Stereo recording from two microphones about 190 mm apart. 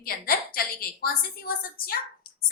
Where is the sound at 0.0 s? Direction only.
50° left (ahead or behind).